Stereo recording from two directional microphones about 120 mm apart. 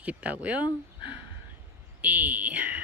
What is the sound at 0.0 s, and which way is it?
Speech, 10° right (ahead or behind).